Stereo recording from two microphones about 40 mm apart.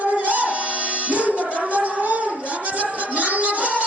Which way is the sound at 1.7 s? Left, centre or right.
Right.